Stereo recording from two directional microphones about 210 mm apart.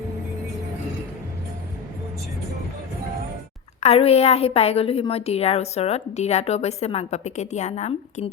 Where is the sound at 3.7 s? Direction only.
30° left (ahead or behind).